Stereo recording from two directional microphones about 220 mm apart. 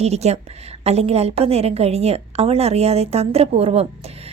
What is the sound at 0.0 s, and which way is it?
A woman's voice, 30° right (ahead or behind).